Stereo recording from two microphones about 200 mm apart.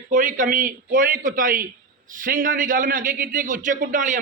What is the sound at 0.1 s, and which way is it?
A man's voice, 40° right (ahead or behind).